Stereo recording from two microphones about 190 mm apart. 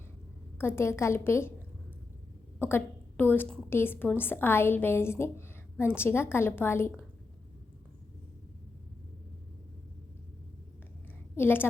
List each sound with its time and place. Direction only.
0.6 s a woman's voice: 10° left (ahead or behind)
2.6 s a woman's voice: 10° left (ahead or behind)
11.3 s a woman's voice: 10° left (ahead or behind)